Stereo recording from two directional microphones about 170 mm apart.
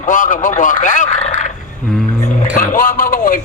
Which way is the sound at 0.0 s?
50° left (ahead or behind).